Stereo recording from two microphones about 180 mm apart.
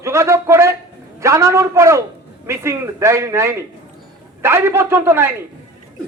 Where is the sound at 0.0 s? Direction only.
15° right (ahead or behind).